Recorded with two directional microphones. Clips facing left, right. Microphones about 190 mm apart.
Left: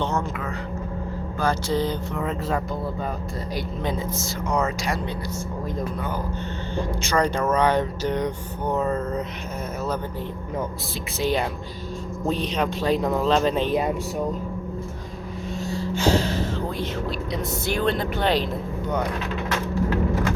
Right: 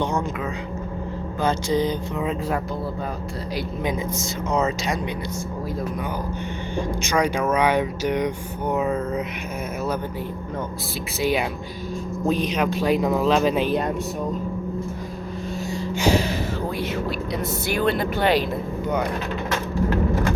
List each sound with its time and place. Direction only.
1.4 s speech: 20° right (ahead or behind)
4.4 s speech: 20° right (ahead or behind)
6.7 s speech: 15° right (ahead or behind)
11.2 s speech: 10° right (ahead or behind)
15.7 s speech: 15° right (ahead or behind)